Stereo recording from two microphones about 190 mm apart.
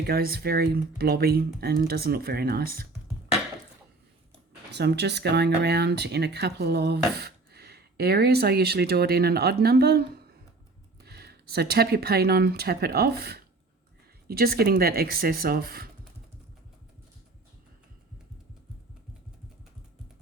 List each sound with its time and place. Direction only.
0.0 s speech: 55° right (ahead or behind)
4.7 s speech: 60° right (ahead or behind)
11.0 s speech: 55° right (ahead or behind)